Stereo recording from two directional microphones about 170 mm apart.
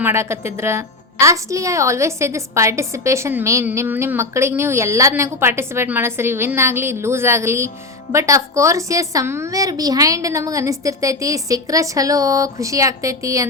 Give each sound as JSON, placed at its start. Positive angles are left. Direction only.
{"t": 0.0, "sound": "a woman's voice", "side_deg": -15}